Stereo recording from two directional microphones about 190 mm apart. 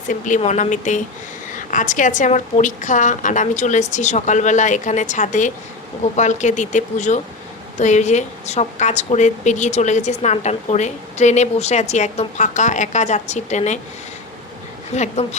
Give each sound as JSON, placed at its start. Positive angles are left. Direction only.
{"t": 0.1, "sound": "a woman's voice", "side_deg": 40}
{"t": 14.9, "sound": "a woman's voice", "side_deg": 35}